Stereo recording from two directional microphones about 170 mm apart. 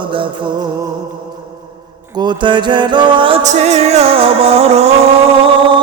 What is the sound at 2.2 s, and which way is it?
Music, 25° right (ahead or behind).